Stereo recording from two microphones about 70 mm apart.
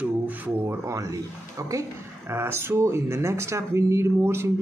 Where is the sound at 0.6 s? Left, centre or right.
Right.